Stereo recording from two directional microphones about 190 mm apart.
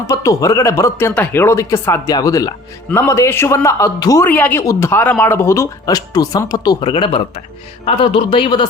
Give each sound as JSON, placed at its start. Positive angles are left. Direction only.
{"t": 0.1, "sound": "a man's voice", "side_deg": 15}